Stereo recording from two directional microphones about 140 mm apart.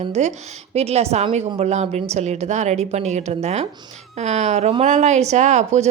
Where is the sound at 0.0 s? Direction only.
55° right (ahead or behind).